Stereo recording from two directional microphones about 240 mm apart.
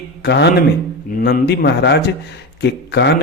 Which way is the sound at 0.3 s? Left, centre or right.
Left.